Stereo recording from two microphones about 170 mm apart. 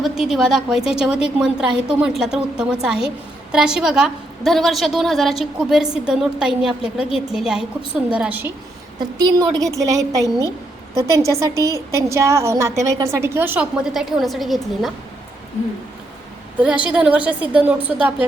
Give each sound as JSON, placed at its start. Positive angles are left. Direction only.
{"t": 0.0, "sound": "a woman's voice", "side_deg": 0}
{"t": 9.0, "sound": "a woman's voice", "side_deg": -25}
{"t": 16.6, "sound": "a woman's voice", "side_deg": -5}